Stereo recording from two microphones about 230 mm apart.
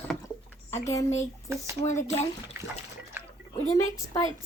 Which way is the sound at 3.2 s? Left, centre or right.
Centre.